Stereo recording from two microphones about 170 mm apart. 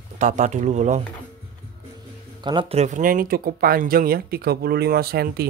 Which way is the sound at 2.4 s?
25° right (ahead or behind).